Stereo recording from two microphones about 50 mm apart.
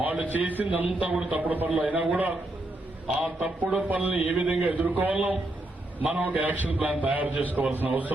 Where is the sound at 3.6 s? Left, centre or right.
Right.